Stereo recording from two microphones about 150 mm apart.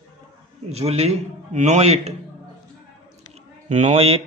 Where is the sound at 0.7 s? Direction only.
45° right (ahead or behind).